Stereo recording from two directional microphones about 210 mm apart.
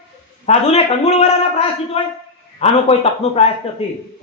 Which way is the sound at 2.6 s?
30° left (ahead or behind).